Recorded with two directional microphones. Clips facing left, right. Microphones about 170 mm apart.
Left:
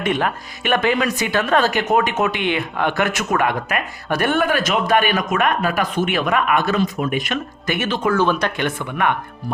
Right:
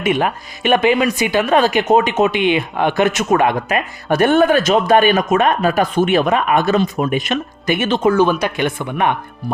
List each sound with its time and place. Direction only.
0.0 s speech: 15° right (ahead or behind)